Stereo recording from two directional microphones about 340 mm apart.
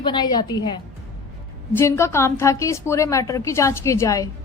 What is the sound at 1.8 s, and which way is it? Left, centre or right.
A woman's voice, centre.